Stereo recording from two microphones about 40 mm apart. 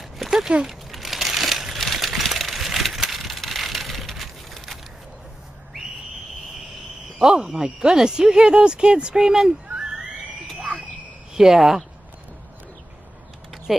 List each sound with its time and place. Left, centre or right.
0.2 s a sound: centre
0.7 s crumpling: centre
1.8 s vehicle: centre
7.2 s speech: centre
9.7 s a sound: centre
11.3 s speech: centre
13.7 s speech: centre